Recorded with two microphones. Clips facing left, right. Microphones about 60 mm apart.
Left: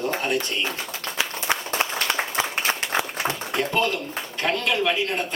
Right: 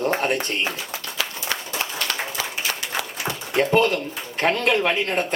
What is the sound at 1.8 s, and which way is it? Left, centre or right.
Applause, left.